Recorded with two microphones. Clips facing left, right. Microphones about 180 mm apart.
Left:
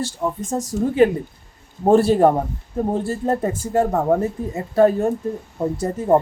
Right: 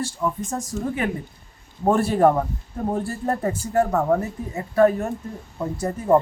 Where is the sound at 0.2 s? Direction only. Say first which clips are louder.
Left 4 dB; 30° left (ahead or behind).